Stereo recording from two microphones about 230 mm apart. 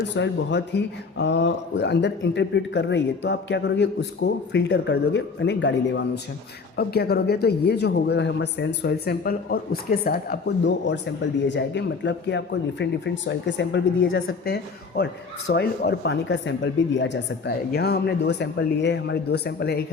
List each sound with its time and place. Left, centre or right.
0.1 s speech: left
14.4 s speech: left